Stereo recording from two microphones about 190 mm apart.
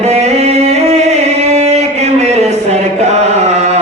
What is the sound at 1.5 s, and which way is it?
Chant, 35° right (ahead or behind).